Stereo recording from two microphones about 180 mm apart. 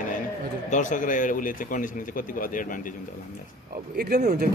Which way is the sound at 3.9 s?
60° right (ahead or behind).